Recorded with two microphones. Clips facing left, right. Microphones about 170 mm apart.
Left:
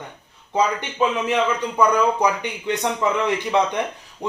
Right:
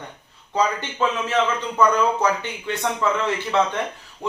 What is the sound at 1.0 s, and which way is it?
A man's voice, 15° left (ahead or behind).